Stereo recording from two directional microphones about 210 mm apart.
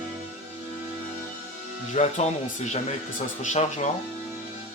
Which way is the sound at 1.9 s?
35° left (ahead or behind).